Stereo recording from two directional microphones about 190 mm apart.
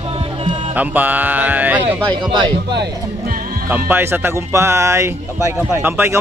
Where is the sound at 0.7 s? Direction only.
10° right (ahead or behind).